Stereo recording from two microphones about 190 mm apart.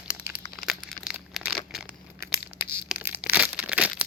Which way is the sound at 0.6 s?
Centre (ahead or behind).